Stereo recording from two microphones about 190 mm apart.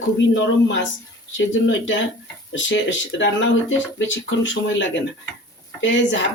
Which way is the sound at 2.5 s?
75° left (ahead or behind).